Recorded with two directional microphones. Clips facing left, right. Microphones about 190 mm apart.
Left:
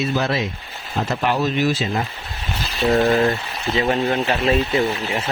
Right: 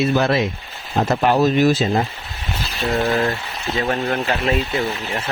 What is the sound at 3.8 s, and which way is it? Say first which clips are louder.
Speech: left 2 dB; 5° left (ahead or behind).